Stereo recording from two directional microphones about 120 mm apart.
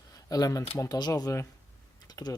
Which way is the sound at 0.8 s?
35° left (ahead or behind).